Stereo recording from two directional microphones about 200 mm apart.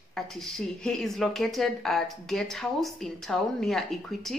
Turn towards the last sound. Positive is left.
turn(degrees=0)  # may be behind; listen again after turning